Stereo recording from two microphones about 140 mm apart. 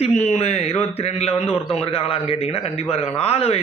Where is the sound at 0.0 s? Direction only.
55° left (ahead or behind).